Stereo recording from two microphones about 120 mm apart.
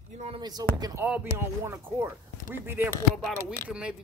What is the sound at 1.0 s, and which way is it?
Speech, 15° right (ahead or behind).